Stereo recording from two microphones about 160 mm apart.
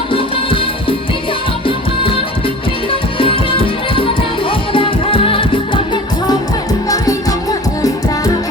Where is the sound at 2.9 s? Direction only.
35° left (ahead or behind).